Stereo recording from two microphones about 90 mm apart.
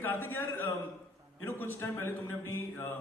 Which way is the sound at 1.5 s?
25° left (ahead or behind).